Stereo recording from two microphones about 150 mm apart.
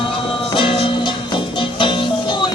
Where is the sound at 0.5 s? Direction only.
35° left (ahead or behind).